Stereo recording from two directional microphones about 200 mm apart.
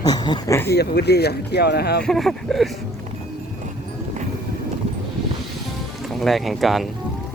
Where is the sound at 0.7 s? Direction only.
55° left (ahead or behind).